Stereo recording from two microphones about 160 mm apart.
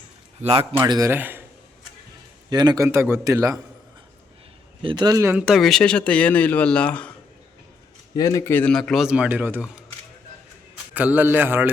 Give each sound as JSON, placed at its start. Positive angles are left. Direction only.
{"t": 0.4, "sound": "a man's voice", "side_deg": -40}
{"t": 0.9, "sound": "a man's voice", "side_deg": -20}
{"t": 2.5, "sound": "a man's voice", "side_deg": -25}
{"t": 4.8, "sound": "speech", "side_deg": -30}
{"t": 8.1, "sound": "speech", "side_deg": 20}
{"t": 10.9, "sound": "a man's voice", "side_deg": -10}